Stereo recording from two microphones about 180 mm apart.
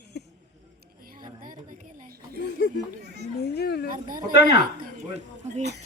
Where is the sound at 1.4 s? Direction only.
50° right (ahead or behind).